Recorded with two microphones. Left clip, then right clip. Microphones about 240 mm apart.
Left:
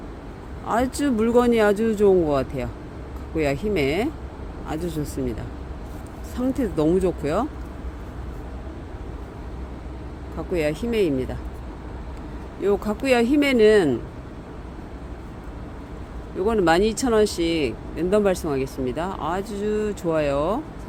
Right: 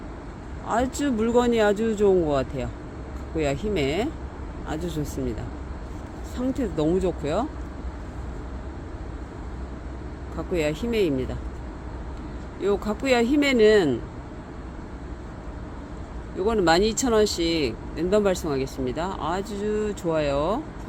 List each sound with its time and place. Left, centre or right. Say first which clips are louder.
0.9 s speech: left 4 dB; centre
6.3 s speech: left 3 dB; centre
10.5 s speech: left 2 dB; centre
12.6 s speech: left 2 dB; centre
16.5 s speech: left 1 dB; centre